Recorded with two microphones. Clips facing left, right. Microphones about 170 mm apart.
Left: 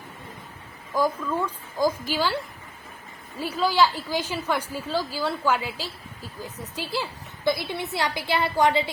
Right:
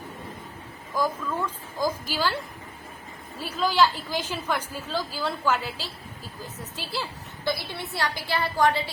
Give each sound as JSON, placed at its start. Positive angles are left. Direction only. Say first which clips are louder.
{"t": 0.9, "sound": "a woman's voice", "louder": "left 3 dB", "side_deg": 10}
{"t": 3.4, "sound": "a woman's voice", "louder": "left 1 dB", "side_deg": 10}